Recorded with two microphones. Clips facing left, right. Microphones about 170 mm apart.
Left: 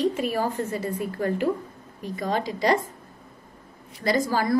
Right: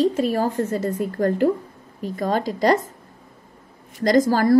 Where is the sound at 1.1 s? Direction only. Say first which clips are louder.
Right 5 dB; 50° right (ahead or behind).